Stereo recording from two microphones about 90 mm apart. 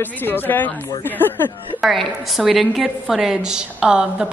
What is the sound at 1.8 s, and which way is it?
A woman's voice, centre (ahead or behind).